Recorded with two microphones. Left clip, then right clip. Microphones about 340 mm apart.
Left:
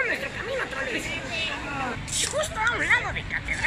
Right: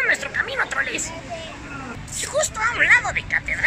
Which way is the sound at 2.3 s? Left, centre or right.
Right.